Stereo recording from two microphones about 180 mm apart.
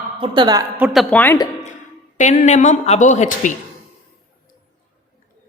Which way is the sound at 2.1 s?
45° left (ahead or behind).